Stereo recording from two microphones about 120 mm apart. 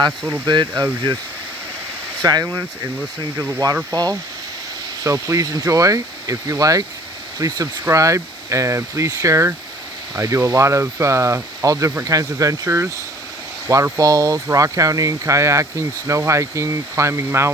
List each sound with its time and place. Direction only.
0.4 s speech: 35° right (ahead or behind)
2.2 s speech: 30° right (ahead or behind)